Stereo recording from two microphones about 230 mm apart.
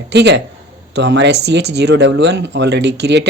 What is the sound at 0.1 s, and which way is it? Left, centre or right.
Speech, right.